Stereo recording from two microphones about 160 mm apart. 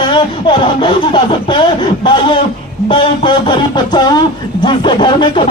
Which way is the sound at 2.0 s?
30° left (ahead or behind).